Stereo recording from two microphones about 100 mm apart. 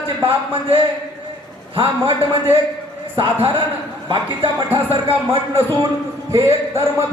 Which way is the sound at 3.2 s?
55° right (ahead or behind).